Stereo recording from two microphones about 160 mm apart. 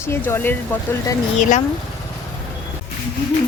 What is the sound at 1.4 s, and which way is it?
Speech, 50° left (ahead or behind).